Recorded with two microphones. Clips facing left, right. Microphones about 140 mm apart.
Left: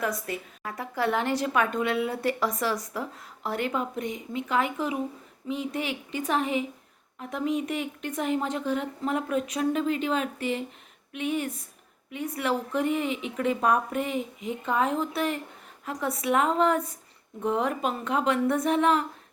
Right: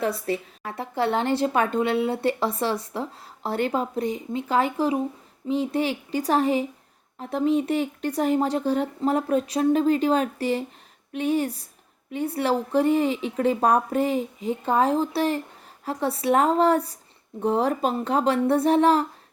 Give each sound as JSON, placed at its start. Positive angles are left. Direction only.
{"t": 0.0, "sound": "a woman's voice", "side_deg": -30}